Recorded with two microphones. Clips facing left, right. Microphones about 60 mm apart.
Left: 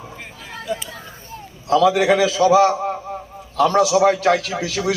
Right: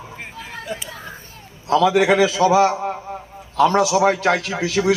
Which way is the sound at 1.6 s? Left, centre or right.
Centre.